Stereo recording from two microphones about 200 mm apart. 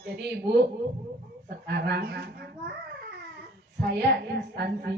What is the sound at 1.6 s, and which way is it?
Speech, 55° right (ahead or behind).